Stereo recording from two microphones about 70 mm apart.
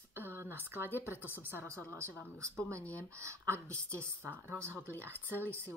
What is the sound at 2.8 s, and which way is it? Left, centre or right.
Speech, left.